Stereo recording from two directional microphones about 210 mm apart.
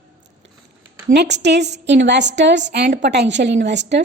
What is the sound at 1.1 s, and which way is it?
A woman's voice, 55° right (ahead or behind).